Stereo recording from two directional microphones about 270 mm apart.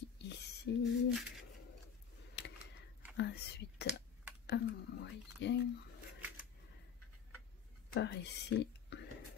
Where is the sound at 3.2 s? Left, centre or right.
Left.